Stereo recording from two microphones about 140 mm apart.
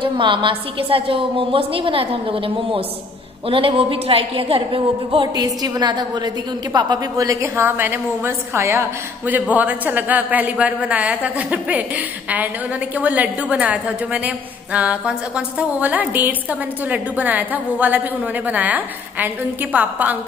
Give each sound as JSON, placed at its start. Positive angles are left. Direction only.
{"t": 0.0, "sound": "a woman's voice", "side_deg": -35}